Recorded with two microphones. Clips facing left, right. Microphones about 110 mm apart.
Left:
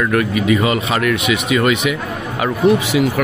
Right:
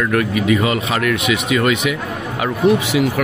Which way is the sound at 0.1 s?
20° left (ahead or behind).